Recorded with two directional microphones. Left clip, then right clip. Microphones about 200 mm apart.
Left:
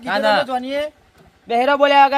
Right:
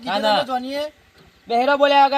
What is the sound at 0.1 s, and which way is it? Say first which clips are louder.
A man's voice: left 2 dB; centre (ahead or behind).